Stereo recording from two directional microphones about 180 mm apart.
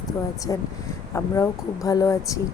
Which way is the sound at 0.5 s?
20° left (ahead or behind).